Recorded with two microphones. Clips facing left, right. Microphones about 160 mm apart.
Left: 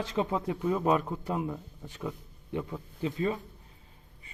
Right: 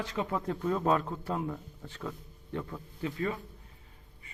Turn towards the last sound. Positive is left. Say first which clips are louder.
# left 3 dB
turn(degrees=20)  # may be behind; listen again after turning